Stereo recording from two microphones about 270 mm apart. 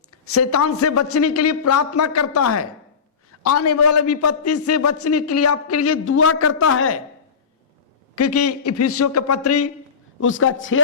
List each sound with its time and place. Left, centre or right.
0.3 s a man's voice: left
8.1 s a man's voice: left
10.2 s speech: left